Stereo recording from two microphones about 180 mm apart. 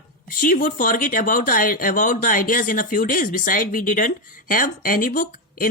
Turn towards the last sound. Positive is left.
turn(degrees=50)  # may be behind; listen again after turning